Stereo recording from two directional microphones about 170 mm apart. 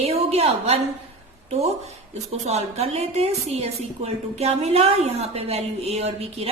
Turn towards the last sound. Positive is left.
turn(degrees=-35)  # may be behind; listen again after turning